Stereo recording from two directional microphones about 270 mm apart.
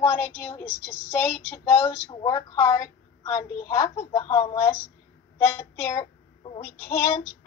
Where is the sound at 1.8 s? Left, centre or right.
Centre.